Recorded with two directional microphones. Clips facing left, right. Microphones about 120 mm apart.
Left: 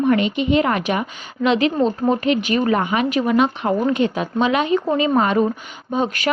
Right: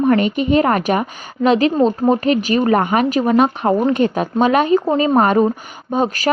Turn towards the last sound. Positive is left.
turn(degrees=-40)  # may be behind; listen again after turning